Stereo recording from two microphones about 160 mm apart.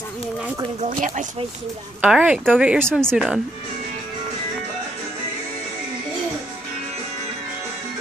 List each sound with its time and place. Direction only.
0.7 s speech: 55° right (ahead or behind)
2.0 s speech: 5° right (ahead or behind)
2.9 s speech: 5° left (ahead or behind)